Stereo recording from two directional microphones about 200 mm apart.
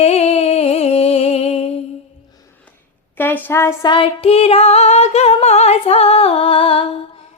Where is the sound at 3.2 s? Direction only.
10° left (ahead or behind); by 6.8 s 30° left (ahead or behind).